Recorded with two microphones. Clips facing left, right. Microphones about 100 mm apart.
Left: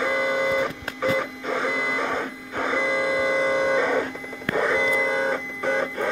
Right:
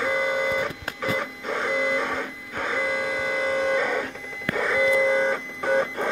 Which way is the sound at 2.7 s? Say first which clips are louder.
Left 4 dB; 5° left (ahead or behind).